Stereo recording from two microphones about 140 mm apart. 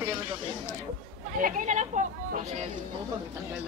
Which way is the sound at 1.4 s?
60° right (ahead or behind).